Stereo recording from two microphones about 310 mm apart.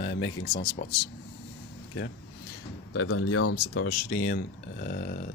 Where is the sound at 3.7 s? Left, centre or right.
Left.